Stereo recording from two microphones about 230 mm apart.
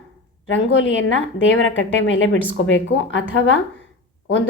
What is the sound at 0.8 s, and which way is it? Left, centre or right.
A woman's voice, left.